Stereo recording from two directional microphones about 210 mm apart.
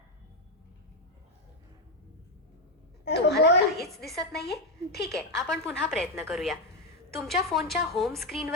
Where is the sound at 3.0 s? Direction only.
50° left (ahead or behind).